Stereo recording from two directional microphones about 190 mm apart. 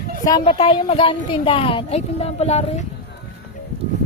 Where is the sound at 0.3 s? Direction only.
25° left (ahead or behind).